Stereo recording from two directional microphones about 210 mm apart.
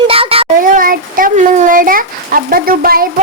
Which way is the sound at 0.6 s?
40° right (ahead or behind).